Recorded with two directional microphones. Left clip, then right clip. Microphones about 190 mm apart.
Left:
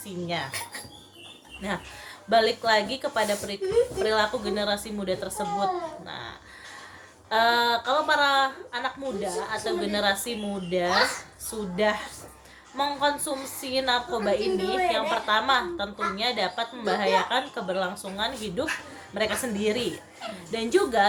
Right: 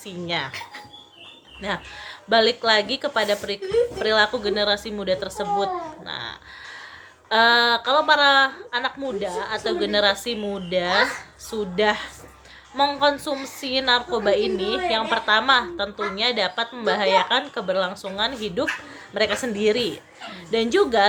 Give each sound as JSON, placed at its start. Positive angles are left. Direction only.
{"t": 0.3, "sound": "speech", "side_deg": -30}
{"t": 1.6, "sound": "a woman's voice", "side_deg": -25}
{"t": 6.1, "sound": "a sound", "side_deg": -25}
{"t": 7.3, "sound": "a woman's voice", "side_deg": -25}